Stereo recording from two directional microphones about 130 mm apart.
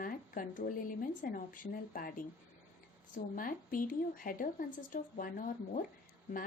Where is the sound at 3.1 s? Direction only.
90° left.